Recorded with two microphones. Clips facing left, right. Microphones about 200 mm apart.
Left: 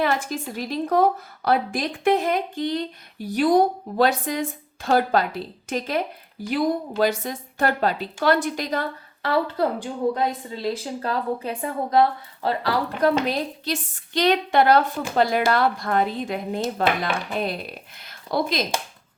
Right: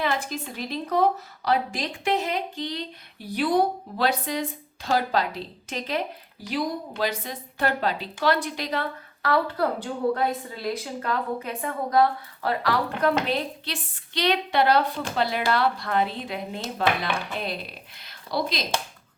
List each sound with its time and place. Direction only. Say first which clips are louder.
0.0 s a woman's voice: left 4 dB; 50° left (ahead or behind)
9.2 s a woman's voice: left 2 dB; 25° left (ahead or behind); by 18.6 s 50° left (ahead or behind)